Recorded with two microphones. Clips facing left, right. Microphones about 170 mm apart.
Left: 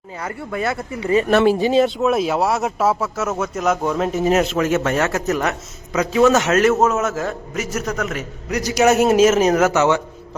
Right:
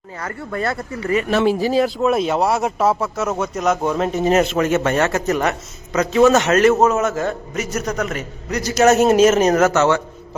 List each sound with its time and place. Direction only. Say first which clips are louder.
0.2 s speech: even; 10° left (ahead or behind)
0.6 s speech: even; centre (ahead or behind)
0.9 s speech: left 5 dB; 20° left (ahead or behind)
1.8 s speech: even; centre (ahead or behind)